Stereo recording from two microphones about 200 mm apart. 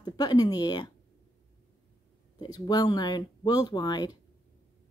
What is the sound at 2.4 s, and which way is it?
A woman's voice, 20° left (ahead or behind).